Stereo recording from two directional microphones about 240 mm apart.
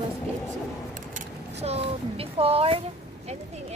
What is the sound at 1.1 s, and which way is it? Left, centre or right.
Speech, right.